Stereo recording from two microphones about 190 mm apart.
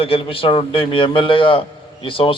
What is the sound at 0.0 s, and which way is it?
A man's voice, 30° left (ahead or behind).